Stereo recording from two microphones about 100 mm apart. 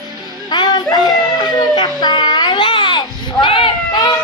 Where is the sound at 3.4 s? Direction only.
60° left (ahead or behind).